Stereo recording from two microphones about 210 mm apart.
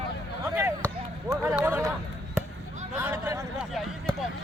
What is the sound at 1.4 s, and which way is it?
Speech, 10° right (ahead or behind).